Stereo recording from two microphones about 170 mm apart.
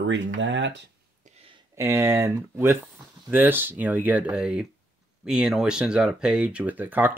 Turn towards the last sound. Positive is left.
turn(degrees=-10)  # may be behind; listen again after turning